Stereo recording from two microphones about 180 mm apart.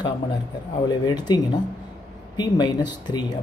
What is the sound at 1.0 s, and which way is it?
Speech, 25° left (ahead or behind).